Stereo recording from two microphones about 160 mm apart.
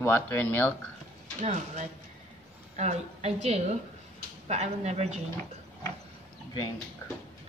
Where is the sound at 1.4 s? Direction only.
50° right (ahead or behind).